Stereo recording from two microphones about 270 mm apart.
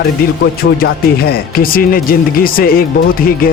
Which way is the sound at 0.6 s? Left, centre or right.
Left.